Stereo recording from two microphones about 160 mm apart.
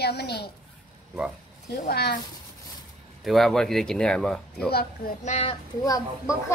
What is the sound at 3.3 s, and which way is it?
Speech, centre (ahead or behind).